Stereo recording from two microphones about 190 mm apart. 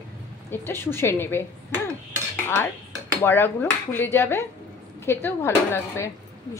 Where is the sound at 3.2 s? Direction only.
10° left (ahead or behind).